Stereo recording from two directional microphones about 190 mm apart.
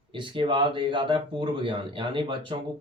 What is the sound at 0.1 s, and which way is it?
Speech, 25° right (ahead or behind).